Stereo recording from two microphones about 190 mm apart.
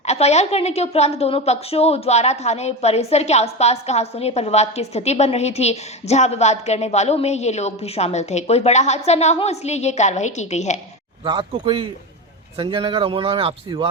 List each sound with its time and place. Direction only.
0.0 s a woman's voice: 35° left (ahead or behind)
11.2 s speech: 25° right (ahead or behind)